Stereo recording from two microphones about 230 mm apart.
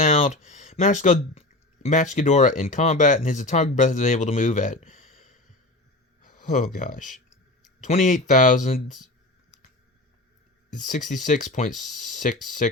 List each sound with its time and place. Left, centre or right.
0.0 s a sound: left
2.1 s speech: left
6.7 s speech: left
10.7 s speech: left
11.7 s speech: centre
11.9 s speech: left